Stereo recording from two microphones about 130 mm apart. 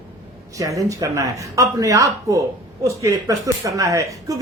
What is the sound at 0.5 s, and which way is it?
Speech, 25° right (ahead or behind).